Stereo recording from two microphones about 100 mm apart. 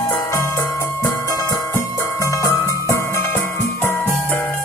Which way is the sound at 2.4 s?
35° left (ahead or behind).